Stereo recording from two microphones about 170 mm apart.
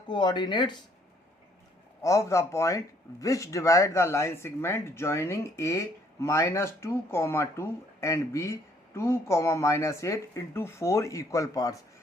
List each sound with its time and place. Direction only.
0.1 s speech: 25° left (ahead or behind)
2.0 s speech: 20° left (ahead or behind)